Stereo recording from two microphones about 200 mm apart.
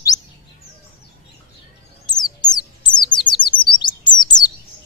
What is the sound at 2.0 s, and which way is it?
Chirp, 20° left (ahead or behind).